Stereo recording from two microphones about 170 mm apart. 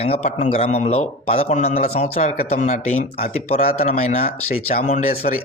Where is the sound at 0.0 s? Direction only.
40° left (ahead or behind).